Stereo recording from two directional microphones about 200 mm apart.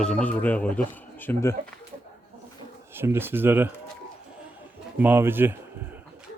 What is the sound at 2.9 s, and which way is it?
Chicken, 10° right (ahead or behind).